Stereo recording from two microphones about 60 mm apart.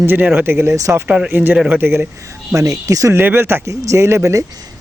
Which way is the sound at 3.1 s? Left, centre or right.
Right.